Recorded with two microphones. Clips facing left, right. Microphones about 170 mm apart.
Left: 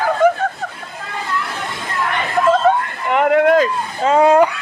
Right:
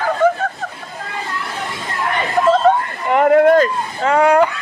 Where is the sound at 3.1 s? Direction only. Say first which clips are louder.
Right 2 dB; centre (ahead or behind).